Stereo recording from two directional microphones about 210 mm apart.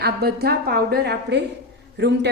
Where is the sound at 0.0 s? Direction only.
50° right (ahead or behind).